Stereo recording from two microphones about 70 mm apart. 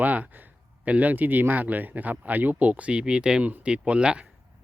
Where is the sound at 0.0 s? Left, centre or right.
Right.